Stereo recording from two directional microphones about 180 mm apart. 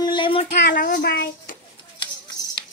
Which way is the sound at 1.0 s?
70° left (ahead or behind).